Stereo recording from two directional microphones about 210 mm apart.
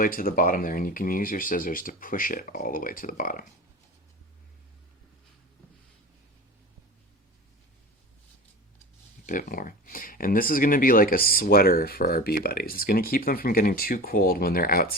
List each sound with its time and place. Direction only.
0.0 s speech: 40° left (ahead or behind)
9.2 s speech: 40° left (ahead or behind)